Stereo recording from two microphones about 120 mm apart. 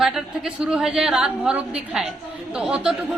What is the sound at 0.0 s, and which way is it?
A woman's voice, 5° right (ahead or behind).